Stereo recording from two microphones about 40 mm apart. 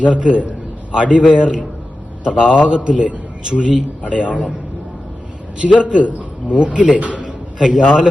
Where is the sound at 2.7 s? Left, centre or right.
Right.